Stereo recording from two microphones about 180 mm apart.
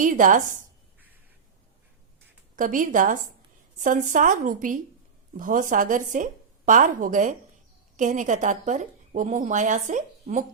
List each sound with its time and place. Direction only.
0.0 s a woman's voice: 45° right (ahead or behind)
2.6 s a woman's voice: 50° right (ahead or behind)